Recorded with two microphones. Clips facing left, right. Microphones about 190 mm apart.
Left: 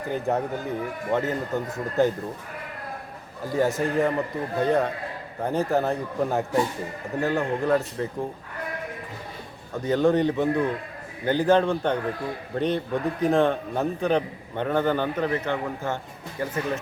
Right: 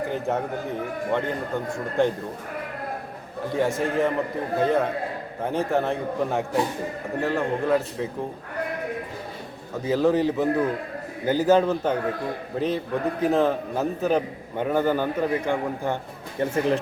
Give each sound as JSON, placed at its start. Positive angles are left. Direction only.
{"t": 0.1, "sound": "a man's voice", "side_deg": 0}
{"t": 3.5, "sound": "a man's voice", "side_deg": 0}
{"t": 9.7, "sound": "a man's voice", "side_deg": 0}
{"t": 16.4, "sound": "speech", "side_deg": -30}